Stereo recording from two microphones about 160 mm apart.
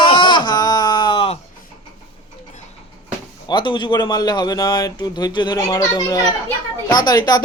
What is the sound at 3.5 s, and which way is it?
Speech, 30° left (ahead or behind).